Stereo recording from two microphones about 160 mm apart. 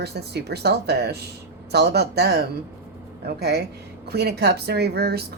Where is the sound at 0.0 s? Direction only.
90° right.